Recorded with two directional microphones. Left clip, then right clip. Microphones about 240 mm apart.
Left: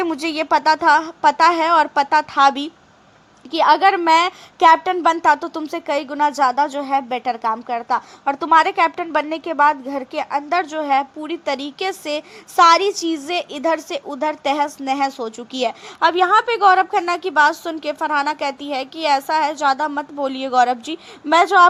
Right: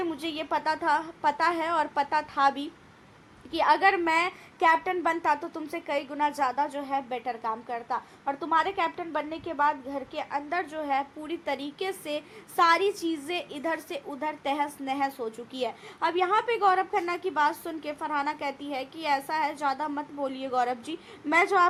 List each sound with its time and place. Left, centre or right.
0.0 s a woman's voice: left